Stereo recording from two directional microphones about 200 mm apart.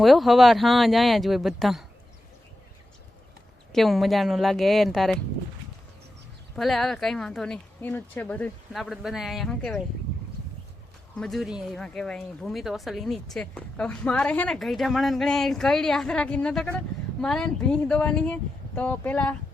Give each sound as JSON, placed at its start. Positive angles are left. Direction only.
{"t": 0.0, "sound": "speech", "side_deg": 0}
{"t": 3.7, "sound": "speech", "side_deg": 0}
{"t": 6.6, "sound": "speech", "side_deg": 0}
{"t": 11.2, "sound": "speech", "side_deg": 0}